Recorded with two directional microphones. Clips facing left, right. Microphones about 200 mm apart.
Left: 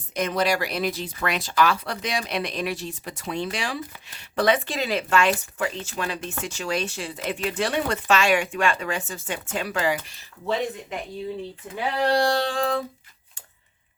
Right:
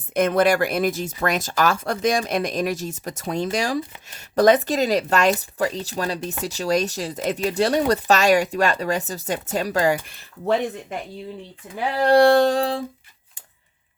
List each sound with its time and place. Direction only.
0.1 s speech: 55° right (ahead or behind)
10.1 s speech: 55° right (ahead or behind)
12.0 s speech: 55° right (ahead or behind)
12.5 s speech: 35° right (ahead or behind)